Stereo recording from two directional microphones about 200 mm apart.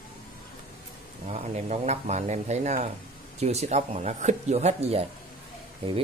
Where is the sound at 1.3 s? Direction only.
35° right (ahead or behind).